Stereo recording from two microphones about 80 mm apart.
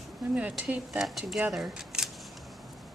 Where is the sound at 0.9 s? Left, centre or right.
Centre.